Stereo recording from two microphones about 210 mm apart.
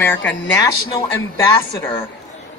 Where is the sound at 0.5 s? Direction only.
15° left (ahead or behind).